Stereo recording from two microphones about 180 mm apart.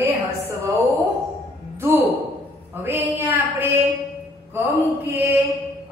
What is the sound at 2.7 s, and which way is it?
A woman's voice, 15° right (ahead or behind).